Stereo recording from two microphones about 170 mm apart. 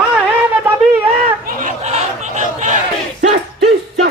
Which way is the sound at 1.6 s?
45° right (ahead or behind).